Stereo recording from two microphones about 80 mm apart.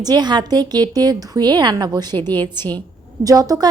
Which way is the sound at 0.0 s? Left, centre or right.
Right.